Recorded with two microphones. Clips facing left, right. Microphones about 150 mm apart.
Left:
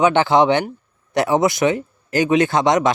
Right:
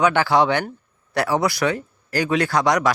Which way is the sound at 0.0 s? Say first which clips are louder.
Left 3 dB; 20° left (ahead or behind).